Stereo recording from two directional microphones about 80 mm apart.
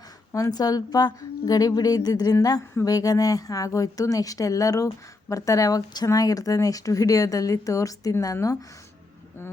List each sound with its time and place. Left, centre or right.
0.5 s speech: left